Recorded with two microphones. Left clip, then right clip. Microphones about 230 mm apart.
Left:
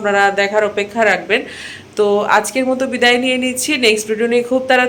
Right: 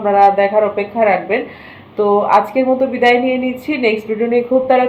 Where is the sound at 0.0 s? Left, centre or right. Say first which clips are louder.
Right 3 dB; centre.